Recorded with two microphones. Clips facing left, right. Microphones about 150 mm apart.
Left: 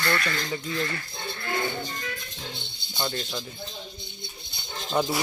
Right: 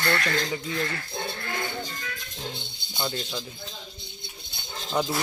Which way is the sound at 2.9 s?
5° right (ahead or behind).